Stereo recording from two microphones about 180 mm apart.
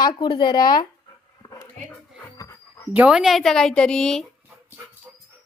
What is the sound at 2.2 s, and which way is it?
Music, 15° left (ahead or behind).